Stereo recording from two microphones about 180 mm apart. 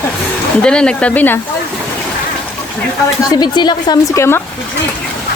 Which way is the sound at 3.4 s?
25° left (ahead or behind).